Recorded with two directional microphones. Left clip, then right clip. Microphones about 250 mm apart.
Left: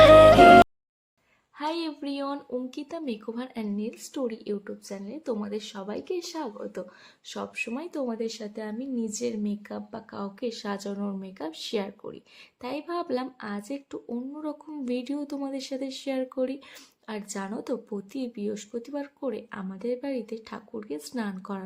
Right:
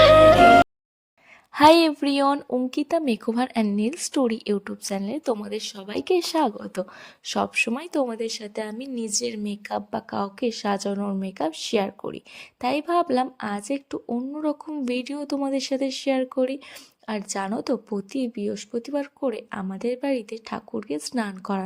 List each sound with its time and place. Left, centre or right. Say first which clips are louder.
0.0 s music: even; centre
1.5 s a woman's voice: right 16 dB; right